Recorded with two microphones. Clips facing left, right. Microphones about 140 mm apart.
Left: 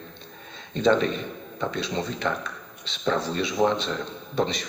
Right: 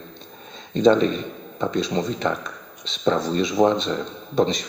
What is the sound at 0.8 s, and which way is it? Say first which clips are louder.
A man's voice: right 5 dB; 20° right (ahead or behind).